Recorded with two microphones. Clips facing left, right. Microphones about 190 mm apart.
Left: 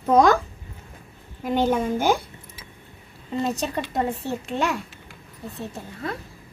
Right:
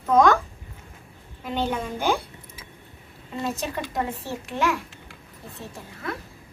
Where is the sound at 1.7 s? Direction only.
45° left (ahead or behind).